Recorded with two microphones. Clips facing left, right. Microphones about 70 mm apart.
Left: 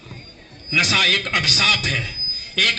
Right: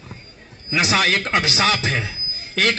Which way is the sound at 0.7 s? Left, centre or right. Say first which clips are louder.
Right 1 dB; right.